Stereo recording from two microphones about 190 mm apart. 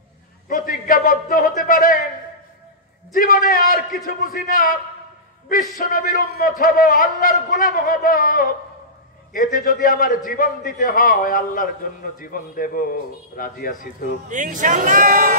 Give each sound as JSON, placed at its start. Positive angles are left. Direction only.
{"t": 0.5, "sound": "a man's voice", "side_deg": 45}
{"t": 3.1, "sound": "a man's voice", "side_deg": 50}
{"t": 14.3, "sound": "speech", "side_deg": -40}